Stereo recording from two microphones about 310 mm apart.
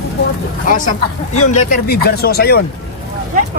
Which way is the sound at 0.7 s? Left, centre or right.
Left.